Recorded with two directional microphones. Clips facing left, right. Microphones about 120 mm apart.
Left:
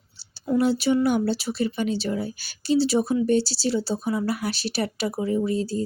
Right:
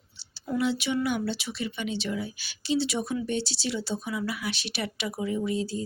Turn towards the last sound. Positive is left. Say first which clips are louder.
# left 5 dB
turn(degrees=40)  # may be behind; listen again after turning